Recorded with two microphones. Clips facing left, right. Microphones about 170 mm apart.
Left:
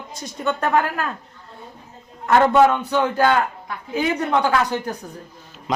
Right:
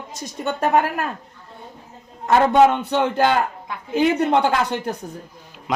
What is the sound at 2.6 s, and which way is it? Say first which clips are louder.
Speech: right 1 dB; 25° right (ahead or behind).